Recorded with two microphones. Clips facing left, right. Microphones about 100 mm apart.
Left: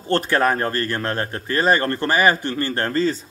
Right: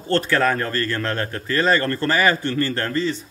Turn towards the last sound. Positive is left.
turn(degrees=40)  # may be behind; listen again after turning